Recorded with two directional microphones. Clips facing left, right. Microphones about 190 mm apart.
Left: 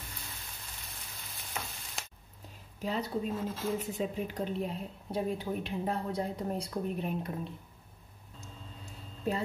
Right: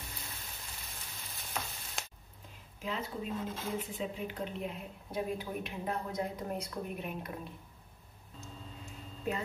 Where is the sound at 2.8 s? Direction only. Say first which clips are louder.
Left 4 dB; 35° left (ahead or behind).